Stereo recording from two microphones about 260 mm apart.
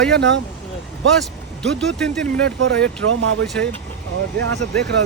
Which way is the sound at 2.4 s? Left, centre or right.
Right.